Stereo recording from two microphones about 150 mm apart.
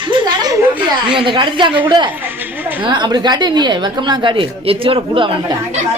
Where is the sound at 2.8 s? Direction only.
30° right (ahead or behind).